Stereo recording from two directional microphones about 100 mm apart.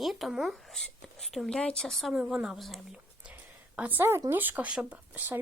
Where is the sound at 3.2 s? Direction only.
15° right (ahead or behind).